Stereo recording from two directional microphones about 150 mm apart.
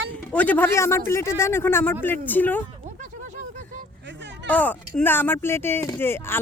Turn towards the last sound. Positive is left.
turn(degrees=15)  # may be behind; listen again after turning